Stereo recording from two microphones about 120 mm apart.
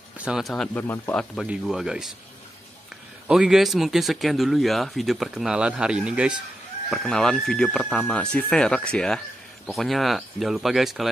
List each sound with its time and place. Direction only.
0.2 s speech: 5° right (ahead or behind)
0.7 s speech: 20° left (ahead or behind)
1.1 s speech: 5° left (ahead or behind)
3.3 s speech: 5° right (ahead or behind)
6.9 s speech: 5° left (ahead or behind)